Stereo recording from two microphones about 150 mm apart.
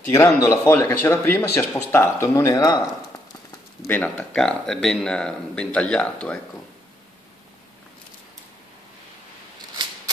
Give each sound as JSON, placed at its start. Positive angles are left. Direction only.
{"t": 0.1, "sound": "speech", "side_deg": 20}
{"t": 3.8, "sound": "speech", "side_deg": 10}